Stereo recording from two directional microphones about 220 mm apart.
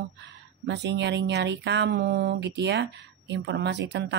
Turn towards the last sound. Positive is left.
turn(degrees=-50)  # may be behind; listen again after turning